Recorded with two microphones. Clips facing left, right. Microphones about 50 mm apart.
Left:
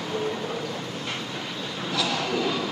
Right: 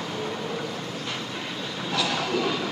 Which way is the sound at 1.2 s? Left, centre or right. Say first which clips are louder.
Even; centre.